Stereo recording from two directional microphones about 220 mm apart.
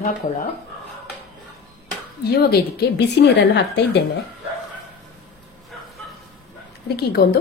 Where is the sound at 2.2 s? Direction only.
45° left (ahead or behind).